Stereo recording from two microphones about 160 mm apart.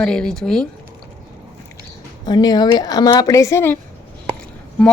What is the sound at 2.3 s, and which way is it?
A woman's voice, 25° left (ahead or behind).